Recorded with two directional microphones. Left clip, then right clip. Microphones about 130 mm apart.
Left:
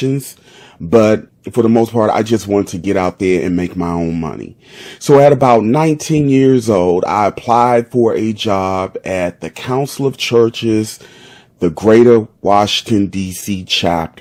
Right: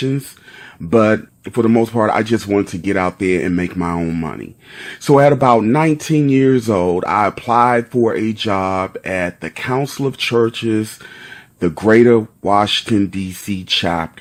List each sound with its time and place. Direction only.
0.0 s speech: 15° left (ahead or behind)